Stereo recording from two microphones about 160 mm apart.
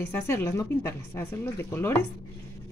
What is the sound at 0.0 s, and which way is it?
Speech, 15° left (ahead or behind).